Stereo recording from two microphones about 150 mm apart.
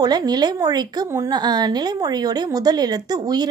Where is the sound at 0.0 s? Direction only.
25° right (ahead or behind).